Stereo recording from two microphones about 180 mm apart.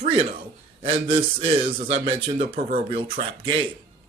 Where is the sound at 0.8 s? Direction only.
30° right (ahead or behind).